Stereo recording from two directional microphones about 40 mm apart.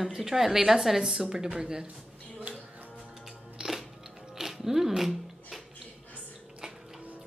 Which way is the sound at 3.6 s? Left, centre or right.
Right.